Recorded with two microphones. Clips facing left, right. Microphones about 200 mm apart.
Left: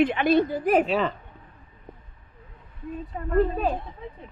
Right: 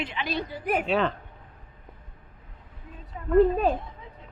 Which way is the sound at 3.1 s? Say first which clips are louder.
Left 2 dB; 50° left (ahead or behind).